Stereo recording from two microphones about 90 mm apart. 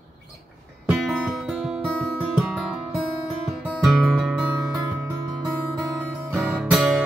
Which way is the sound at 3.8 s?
Centre (ahead or behind).